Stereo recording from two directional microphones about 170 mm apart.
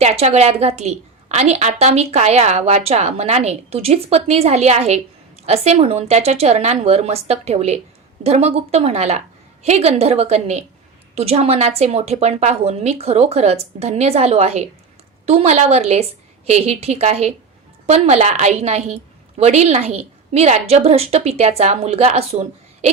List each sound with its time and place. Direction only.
0.0 s a woman's voice: 35° right (ahead or behind)